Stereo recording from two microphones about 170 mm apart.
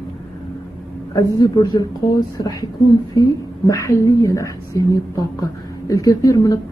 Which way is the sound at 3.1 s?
20° left (ahead or behind).